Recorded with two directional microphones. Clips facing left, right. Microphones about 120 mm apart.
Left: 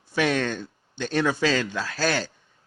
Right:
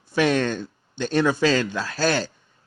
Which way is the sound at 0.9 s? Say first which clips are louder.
Right 3 dB; 30° right (ahead or behind).